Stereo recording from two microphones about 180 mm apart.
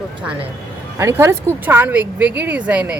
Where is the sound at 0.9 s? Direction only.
15° right (ahead or behind).